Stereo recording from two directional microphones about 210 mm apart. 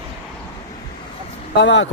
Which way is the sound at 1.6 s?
60° left (ahead or behind).